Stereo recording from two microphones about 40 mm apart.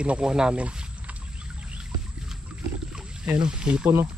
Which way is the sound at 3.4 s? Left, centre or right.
Right.